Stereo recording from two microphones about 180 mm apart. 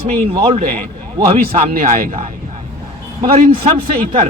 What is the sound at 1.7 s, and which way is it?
Speech, 50° right (ahead or behind).